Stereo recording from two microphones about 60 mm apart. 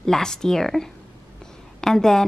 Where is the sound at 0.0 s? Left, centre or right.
Centre.